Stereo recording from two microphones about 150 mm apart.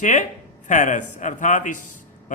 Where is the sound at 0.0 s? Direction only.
55° left (ahead or behind).